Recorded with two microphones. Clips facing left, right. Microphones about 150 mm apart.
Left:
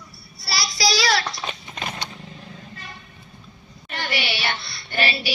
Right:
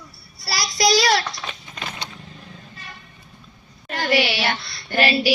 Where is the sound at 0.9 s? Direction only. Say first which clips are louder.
Right 4 dB; 50° right (ahead or behind).